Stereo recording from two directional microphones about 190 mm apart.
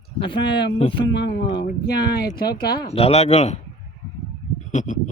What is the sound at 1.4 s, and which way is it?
Speech, 25° left (ahead or behind).